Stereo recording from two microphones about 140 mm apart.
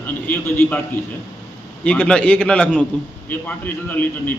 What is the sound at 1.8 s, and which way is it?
A man's voice, 10° left (ahead or behind).